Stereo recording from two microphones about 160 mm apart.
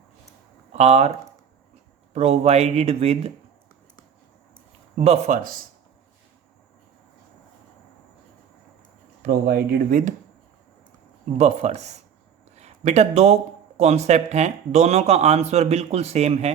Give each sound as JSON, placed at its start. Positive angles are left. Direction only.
{"t": 0.7, "sound": "speech", "side_deg": -40}
{"t": 2.1, "sound": "speech", "side_deg": -40}
{"t": 4.9, "sound": "speech", "side_deg": -40}
{"t": 9.2, "sound": "speech", "side_deg": -70}
{"t": 11.3, "sound": "speech", "side_deg": -45}